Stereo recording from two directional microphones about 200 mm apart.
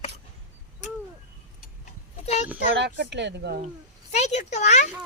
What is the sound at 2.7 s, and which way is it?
Speech, 60° right (ahead or behind).